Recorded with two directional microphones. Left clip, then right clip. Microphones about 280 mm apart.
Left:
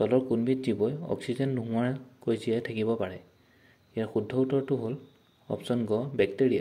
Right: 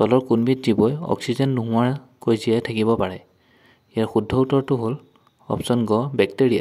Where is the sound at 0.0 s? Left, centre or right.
Right.